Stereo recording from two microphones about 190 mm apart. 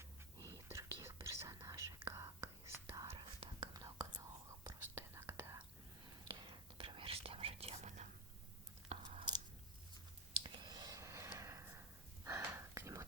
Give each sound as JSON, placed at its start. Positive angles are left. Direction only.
{"t": 0.0, "sound": "whispering", "side_deg": -20}
{"t": 6.4, "sound": "whispering", "side_deg": -30}
{"t": 8.9, "sound": "chewing", "side_deg": -35}
{"t": 10.4, "sound": "clicking", "side_deg": -20}
{"t": 12.2, "sound": "a sound", "side_deg": -15}